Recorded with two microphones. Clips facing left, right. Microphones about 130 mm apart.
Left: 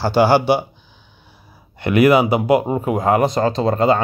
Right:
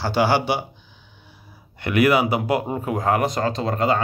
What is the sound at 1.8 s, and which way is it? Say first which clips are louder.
Speech: left 5 dB; 25° left (ahead or behind).